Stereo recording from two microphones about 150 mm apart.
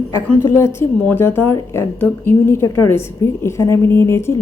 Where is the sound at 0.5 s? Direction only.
15° left (ahead or behind).